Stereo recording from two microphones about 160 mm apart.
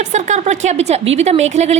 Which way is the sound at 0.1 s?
45° right (ahead or behind).